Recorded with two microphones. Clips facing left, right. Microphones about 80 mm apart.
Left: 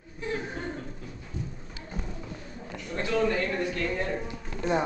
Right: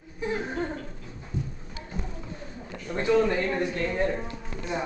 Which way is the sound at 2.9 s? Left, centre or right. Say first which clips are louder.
Right 4 dB; centre.